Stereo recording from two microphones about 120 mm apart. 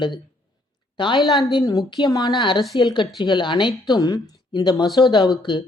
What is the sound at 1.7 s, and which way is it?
A woman's voice, 30° left (ahead or behind).